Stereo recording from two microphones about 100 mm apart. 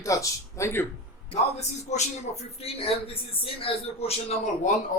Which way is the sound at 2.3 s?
90° left.